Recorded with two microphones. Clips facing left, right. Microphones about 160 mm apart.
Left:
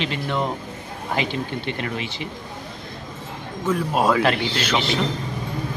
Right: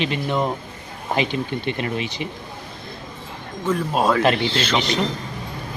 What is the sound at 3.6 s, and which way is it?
Speech, 10° left (ahead or behind).